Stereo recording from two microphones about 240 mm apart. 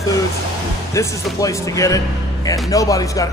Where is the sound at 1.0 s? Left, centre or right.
Centre.